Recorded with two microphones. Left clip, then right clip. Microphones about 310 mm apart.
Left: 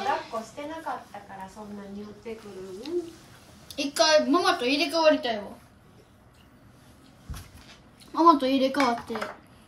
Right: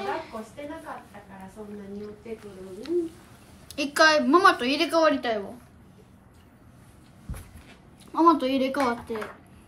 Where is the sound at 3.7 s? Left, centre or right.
Centre.